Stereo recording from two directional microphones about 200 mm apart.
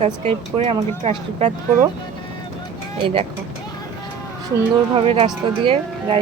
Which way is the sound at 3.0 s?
30° right (ahead or behind).